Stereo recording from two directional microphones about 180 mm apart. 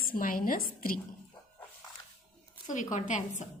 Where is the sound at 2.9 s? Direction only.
45° left (ahead or behind).